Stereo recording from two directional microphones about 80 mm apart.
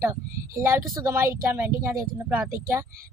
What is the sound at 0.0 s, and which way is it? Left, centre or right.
A woman's voice, right.